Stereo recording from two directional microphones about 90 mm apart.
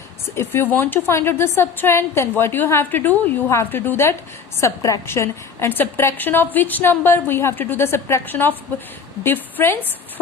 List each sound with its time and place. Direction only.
0.3 s a woman's voice: 25° left (ahead or behind)